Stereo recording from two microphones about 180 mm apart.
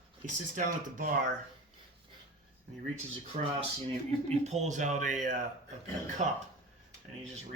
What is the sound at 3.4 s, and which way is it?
Speech, 35° right (ahead or behind).